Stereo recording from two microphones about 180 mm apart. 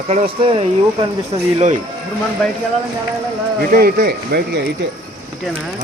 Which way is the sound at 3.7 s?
60° right (ahead or behind).